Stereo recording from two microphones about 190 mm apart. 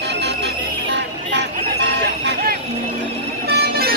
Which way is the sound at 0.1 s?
65° right (ahead or behind).